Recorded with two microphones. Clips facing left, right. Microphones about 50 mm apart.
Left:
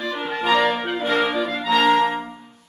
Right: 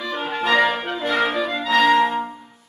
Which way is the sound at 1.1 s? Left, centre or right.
Centre.